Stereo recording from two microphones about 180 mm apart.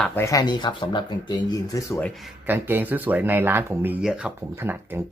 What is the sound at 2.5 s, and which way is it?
Speech, 10° right (ahead or behind).